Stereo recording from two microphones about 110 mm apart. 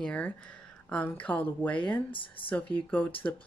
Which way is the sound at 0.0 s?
10° left (ahead or behind).